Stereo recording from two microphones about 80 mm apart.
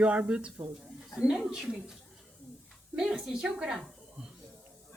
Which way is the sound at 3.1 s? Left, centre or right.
Centre.